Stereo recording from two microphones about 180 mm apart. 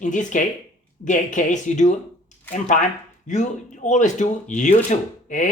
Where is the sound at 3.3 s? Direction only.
40° left (ahead or behind).